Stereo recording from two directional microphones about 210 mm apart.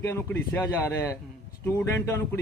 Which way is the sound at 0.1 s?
10° left (ahead or behind).